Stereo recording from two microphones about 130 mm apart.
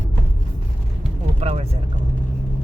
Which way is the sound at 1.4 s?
55° right (ahead or behind).